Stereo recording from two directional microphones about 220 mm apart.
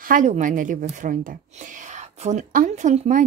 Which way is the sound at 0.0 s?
35° right (ahead or behind).